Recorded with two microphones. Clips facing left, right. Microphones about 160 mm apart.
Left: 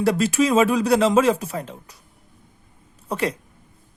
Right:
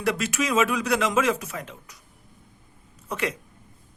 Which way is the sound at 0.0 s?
35° left (ahead or behind).